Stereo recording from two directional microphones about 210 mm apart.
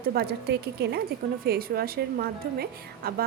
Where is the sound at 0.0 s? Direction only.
45° right (ahead or behind).